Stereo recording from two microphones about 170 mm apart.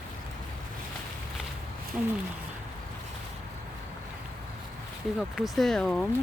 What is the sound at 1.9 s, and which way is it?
Speech, 5° right (ahead or behind).